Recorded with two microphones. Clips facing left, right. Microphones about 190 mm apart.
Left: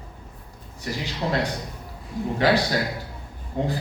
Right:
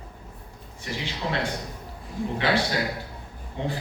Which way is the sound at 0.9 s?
40° left (ahead or behind).